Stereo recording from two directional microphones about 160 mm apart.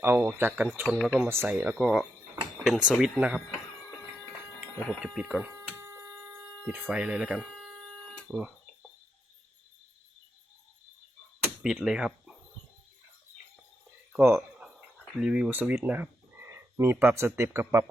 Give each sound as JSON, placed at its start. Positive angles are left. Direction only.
{"t": 0.0, "sound": "speech", "side_deg": -10}
{"t": 1.3, "sound": "speech", "side_deg": -15}
{"t": 4.8, "sound": "speech", "side_deg": 10}
{"t": 5.1, "sound": "speech", "side_deg": 0}
{"t": 5.5, "sound": "a sound", "side_deg": -15}
{"t": 6.7, "sound": "speech", "side_deg": -10}
{"t": 11.6, "sound": "speech", "side_deg": -5}
{"t": 14.1, "sound": "speech", "side_deg": -15}